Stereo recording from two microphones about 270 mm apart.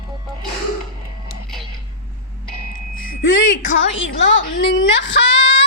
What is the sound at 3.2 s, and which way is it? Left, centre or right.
A woman's voice, left.